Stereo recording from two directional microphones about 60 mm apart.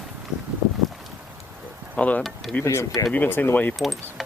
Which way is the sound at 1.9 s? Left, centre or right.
Left.